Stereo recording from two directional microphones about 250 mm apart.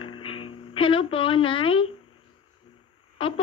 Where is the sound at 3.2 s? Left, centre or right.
Left.